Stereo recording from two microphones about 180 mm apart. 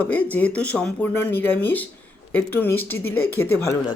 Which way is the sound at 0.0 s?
10° left (ahead or behind).